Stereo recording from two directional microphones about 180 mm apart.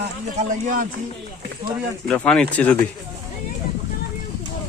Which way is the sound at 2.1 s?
5° left (ahead or behind).